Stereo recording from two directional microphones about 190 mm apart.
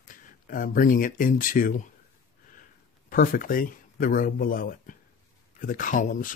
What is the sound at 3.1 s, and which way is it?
Speech, 45° left (ahead or behind).